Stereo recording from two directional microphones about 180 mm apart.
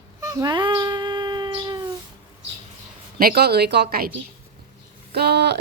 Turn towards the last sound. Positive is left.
turn(degrees=-65)  # may be behind; listen again after turning